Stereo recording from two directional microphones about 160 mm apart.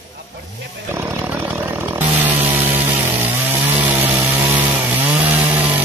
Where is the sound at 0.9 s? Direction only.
15° right (ahead or behind).